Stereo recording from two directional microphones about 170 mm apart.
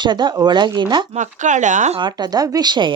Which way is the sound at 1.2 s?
45° right (ahead or behind).